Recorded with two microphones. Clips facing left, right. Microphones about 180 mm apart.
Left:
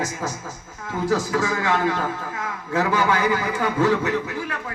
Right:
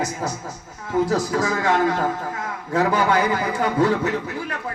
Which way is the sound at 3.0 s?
35° right (ahead or behind).